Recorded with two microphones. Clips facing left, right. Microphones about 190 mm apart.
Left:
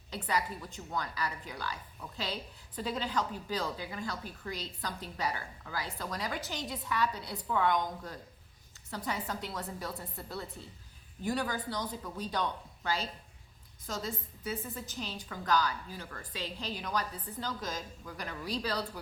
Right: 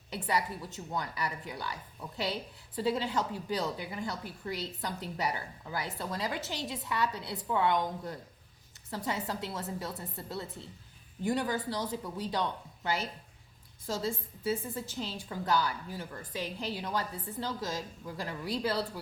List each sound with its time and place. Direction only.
0.1 s a woman's voice: 20° right (ahead or behind)